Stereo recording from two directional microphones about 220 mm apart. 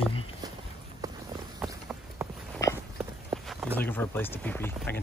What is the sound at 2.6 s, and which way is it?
Walk, 15° left (ahead or behind).